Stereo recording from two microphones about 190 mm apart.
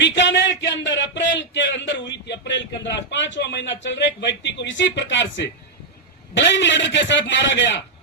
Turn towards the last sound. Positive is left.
turn(degrees=70)  # may be behind; listen again after turning